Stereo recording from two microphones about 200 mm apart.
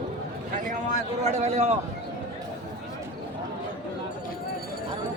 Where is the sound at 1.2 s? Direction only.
35° right (ahead or behind).